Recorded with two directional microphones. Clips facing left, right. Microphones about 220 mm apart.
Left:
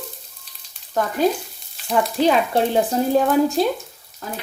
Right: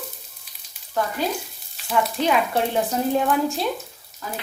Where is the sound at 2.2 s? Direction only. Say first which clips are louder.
Left 5 dB; 35° left (ahead or behind).